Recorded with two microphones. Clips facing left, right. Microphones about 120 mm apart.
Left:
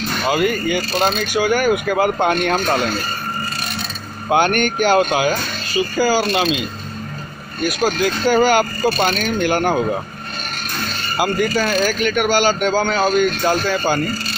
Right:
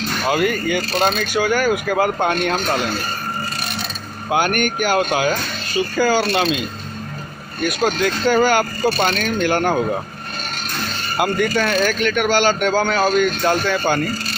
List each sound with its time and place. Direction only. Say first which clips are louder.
0.2 s speech: left 1 dB; 5° left (ahead or behind); by 2.9 s 25° left (ahead or behind)
4.3 s speech: left 3 dB; 25° left (ahead or behind)
5.3 s speech: left 1 dB; 10° left (ahead or behind)
7.6 s speech: left 1 dB; 5° left (ahead or behind)
11.1 s speech: even; 5° left (ahead or behind)